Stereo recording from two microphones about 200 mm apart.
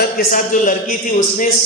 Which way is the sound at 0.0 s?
45° left (ahead or behind).